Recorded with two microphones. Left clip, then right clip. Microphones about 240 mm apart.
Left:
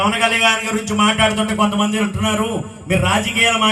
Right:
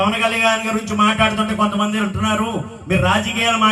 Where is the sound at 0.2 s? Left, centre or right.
Left.